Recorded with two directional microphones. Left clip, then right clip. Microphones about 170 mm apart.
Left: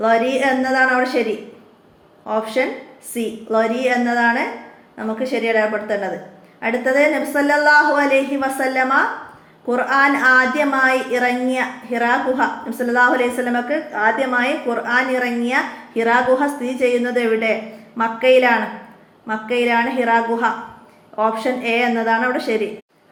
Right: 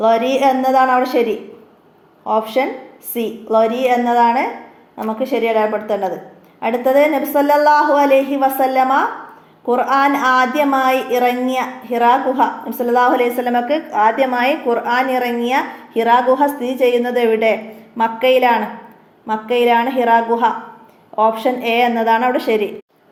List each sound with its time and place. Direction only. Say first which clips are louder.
0.0 s a woman's voice: right 3 dB; 30° right (ahead or behind)
2.2 s a woman's voice: right 3 dB; 30° right (ahead or behind)